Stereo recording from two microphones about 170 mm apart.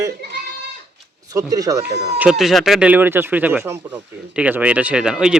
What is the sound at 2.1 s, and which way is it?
Speech, 5° right (ahead or behind).